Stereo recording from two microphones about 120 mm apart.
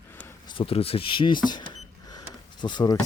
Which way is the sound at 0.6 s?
55° left (ahead or behind).